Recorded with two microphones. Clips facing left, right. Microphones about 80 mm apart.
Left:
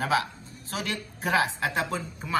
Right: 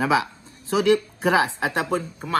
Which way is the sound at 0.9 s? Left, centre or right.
Right.